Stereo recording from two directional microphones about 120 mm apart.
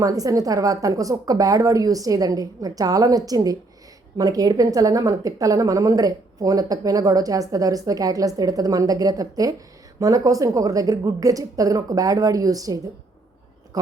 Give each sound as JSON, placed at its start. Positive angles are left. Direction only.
{"t": 0.0, "sound": "a woman's voice", "side_deg": -30}